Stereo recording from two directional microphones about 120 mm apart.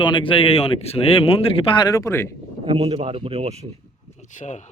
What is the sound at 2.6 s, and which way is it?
Speech, 55° right (ahead or behind).